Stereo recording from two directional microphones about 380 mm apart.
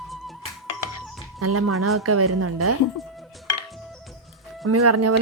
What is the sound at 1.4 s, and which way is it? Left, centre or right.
A woman's voice, right.